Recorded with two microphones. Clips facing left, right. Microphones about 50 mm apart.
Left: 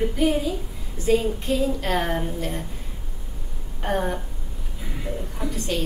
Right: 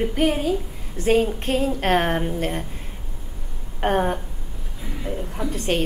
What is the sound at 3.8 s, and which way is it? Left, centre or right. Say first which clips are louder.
Speech: right 4 dB; right.